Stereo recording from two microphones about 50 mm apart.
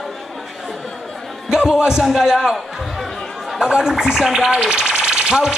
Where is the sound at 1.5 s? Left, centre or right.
Centre.